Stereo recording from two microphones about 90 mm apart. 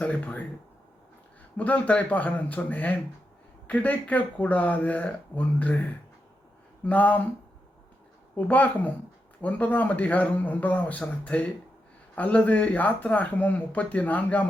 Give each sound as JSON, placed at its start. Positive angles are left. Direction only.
{"t": 0.0, "sound": "speech", "side_deg": 15}
{"t": 1.5, "sound": "speech", "side_deg": 15}
{"t": 6.8, "sound": "a woman's voice", "side_deg": 20}
{"t": 8.4, "sound": "a woman's voice", "side_deg": 20}